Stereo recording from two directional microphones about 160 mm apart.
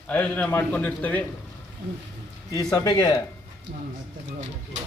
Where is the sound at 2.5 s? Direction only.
20° left (ahead or behind).